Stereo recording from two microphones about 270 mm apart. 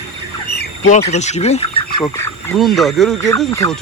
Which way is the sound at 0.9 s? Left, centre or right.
Left.